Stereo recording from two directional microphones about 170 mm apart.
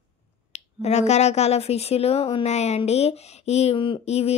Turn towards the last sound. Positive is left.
turn(degrees=40)  # may be behind; listen again after turning